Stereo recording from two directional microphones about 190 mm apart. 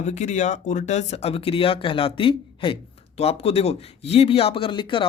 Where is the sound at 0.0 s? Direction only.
40° left (ahead or behind).